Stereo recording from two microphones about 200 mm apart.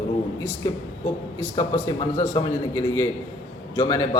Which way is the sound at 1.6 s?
20° left (ahead or behind).